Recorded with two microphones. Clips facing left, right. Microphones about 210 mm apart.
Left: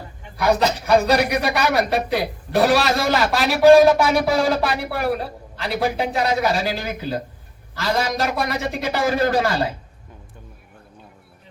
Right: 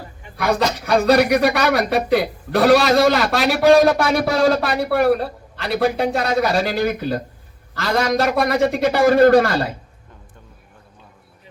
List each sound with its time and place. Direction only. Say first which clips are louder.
0.3 s speech: left 1 dB; 60° right (ahead or behind)